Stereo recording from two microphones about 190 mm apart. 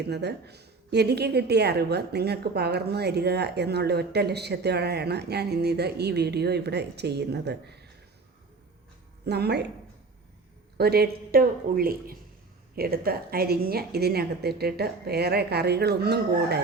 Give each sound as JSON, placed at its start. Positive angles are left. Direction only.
{"t": 0.1, "sound": "a woman's voice", "side_deg": -60}
{"t": 9.2, "sound": "a woman's voice", "side_deg": -60}
{"t": 10.8, "sound": "a woman's voice", "side_deg": -55}